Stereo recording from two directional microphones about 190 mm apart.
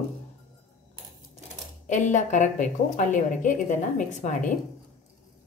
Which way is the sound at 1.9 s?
40° left (ahead or behind).